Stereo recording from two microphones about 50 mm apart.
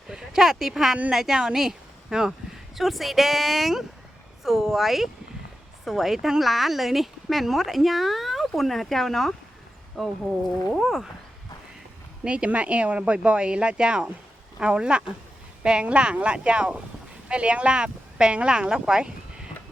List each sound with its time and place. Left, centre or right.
0.1 s a woman's voice: centre
12.2 s speech: centre